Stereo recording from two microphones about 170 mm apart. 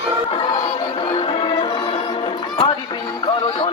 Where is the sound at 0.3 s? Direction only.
30° left (ahead or behind).